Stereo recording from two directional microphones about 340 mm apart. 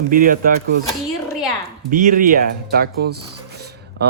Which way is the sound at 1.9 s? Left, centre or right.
Right.